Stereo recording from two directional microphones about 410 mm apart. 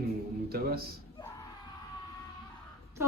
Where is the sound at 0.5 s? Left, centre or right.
Right.